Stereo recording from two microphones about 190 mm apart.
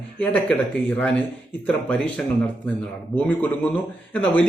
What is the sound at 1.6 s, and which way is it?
A man's voice, 5° left (ahead or behind).